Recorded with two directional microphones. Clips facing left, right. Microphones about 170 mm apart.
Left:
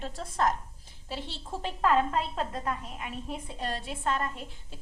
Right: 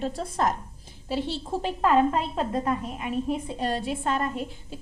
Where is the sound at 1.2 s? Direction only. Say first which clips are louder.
Right 9 dB; 35° right (ahead or behind).